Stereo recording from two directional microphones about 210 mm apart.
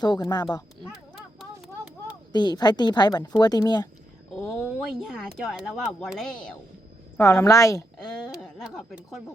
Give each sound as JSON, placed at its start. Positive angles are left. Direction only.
{"t": 0.0, "sound": "speech", "side_deg": 20}
{"t": 0.8, "sound": "a sound", "side_deg": 0}
{"t": 2.3, "sound": "speech", "side_deg": 20}
{"t": 4.4, "sound": "speech", "side_deg": 0}
{"t": 7.3, "sound": "a woman's voice", "side_deg": 15}
{"t": 7.9, "sound": "speech", "side_deg": 5}